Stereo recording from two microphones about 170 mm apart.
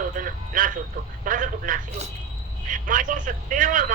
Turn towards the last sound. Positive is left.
turn(degrees=-50)  # may be behind; listen again after turning